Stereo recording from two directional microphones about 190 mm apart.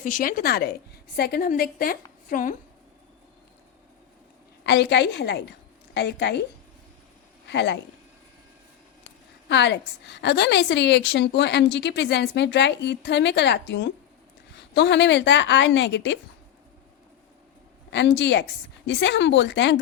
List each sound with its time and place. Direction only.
0.0 s a woman's voice: 45° left (ahead or behind)
4.6 s a woman's voice: 65° left (ahead or behind)
7.4 s speech: 65° left (ahead or behind)
9.5 s a woman's voice: 65° left (ahead or behind)
17.9 s a woman's voice: 65° left (ahead or behind)